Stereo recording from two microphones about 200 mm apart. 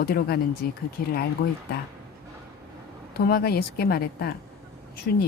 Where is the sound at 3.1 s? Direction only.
50° left (ahead or behind).